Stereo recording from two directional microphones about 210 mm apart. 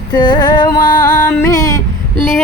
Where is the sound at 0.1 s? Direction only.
20° left (ahead or behind).